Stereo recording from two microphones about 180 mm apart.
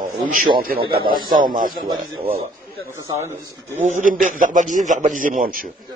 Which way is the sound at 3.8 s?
45° right (ahead or behind).